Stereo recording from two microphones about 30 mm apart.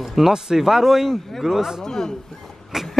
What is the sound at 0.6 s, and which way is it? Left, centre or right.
Speech, centre.